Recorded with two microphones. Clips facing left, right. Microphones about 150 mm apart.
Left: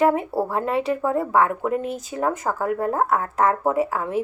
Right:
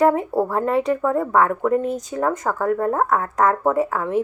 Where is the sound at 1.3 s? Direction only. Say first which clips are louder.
Right 3 dB; 25° left (ahead or behind).